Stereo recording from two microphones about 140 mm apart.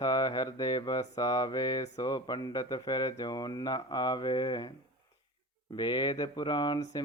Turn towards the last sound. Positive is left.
turn(degrees=30)  # may be behind; listen again after turning